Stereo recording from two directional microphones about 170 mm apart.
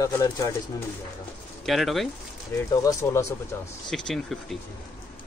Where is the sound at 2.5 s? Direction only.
20° left (ahead or behind).